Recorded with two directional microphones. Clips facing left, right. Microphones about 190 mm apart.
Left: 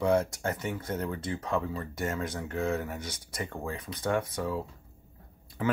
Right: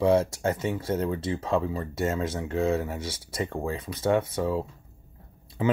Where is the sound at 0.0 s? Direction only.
25° right (ahead or behind).